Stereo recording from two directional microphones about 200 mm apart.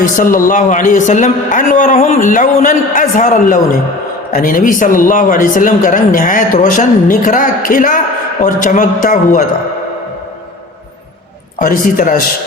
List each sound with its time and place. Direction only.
0.0 s a man's voice: 40° left (ahead or behind)
11.6 s a man's voice: 45° left (ahead or behind)